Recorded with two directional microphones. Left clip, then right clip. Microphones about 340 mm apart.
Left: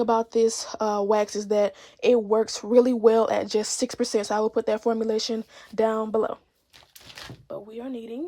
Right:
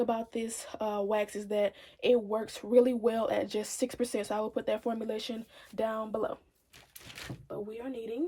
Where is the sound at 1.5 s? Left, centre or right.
Centre.